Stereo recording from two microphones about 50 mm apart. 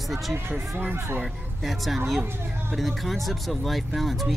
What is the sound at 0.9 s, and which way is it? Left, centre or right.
Speech, right.